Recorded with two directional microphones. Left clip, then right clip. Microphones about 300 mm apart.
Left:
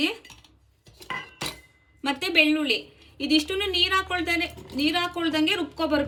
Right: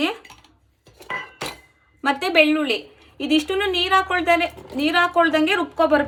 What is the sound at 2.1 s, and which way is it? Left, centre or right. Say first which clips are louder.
A woman's voice: right 4 dB; centre.